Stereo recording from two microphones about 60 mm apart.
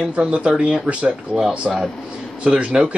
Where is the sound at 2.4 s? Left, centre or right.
Centre.